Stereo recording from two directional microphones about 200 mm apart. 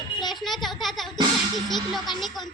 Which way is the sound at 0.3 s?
Centre (ahead or behind).